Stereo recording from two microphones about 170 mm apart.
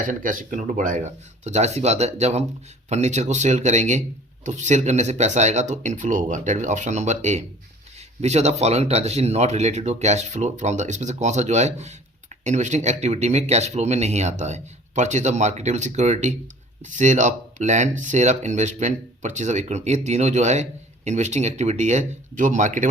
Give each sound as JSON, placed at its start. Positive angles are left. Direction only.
{"t": 0.1, "sound": "speech", "side_deg": -50}